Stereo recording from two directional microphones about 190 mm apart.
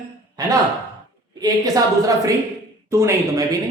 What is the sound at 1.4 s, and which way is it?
A man's voice, 20° right (ahead or behind).